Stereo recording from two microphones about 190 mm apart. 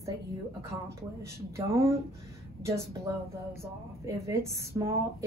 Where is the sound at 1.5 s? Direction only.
15° right (ahead or behind).